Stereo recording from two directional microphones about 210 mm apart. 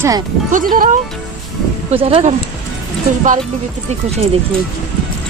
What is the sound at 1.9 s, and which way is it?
Speech, 30° right (ahead or behind).